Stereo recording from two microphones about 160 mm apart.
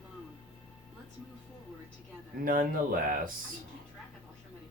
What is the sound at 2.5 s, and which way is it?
Speech, 65° right (ahead or behind).